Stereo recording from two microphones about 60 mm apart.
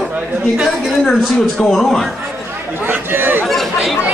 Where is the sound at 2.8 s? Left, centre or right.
Right.